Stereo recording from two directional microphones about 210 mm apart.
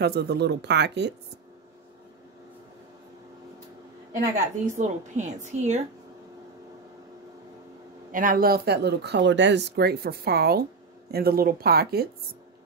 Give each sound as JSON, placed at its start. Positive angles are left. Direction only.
{"t": 0.0, "sound": "speech", "side_deg": -50}
{"t": 4.6, "sound": "a woman's voice", "side_deg": -35}
{"t": 8.1, "sound": "speech", "side_deg": -40}